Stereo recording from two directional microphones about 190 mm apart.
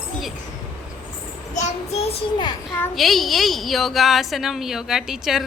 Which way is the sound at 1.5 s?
35° left (ahead or behind).